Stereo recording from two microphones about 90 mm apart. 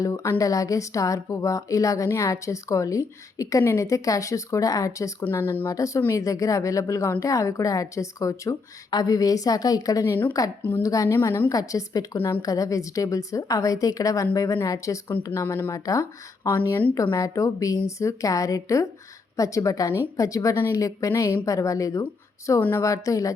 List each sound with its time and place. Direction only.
0.0 s speech: 35° left (ahead or behind)
5.2 s speech: 25° left (ahead or behind)
5.7 s speech: 35° left (ahead or behind)
10.6 s speech: 25° left (ahead or behind)
10.8 s speech: 40° left (ahead or behind)
20.6 s speech: 25° left (ahead or behind)
20.8 s speech: 40° left (ahead or behind)